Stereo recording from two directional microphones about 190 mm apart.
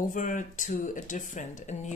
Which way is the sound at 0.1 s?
45° left (ahead or behind).